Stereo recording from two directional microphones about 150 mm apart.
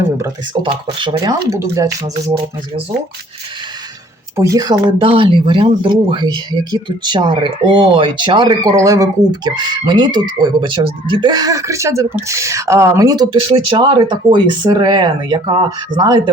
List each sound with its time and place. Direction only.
0.6 s speech: 35° right (ahead or behind)
4.4 s speech: 20° right (ahead or behind)
13.5 s speech: 35° right (ahead or behind)